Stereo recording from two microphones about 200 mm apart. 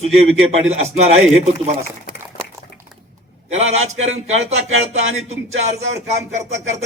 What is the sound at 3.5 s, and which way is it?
Speech, 35° right (ahead or behind).